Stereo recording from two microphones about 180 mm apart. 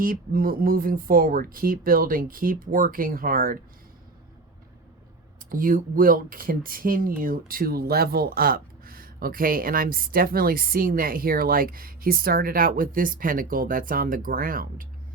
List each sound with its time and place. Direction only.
0.0 s speech: 50° right (ahead or behind)
5.5 s speech: 50° right (ahead or behind)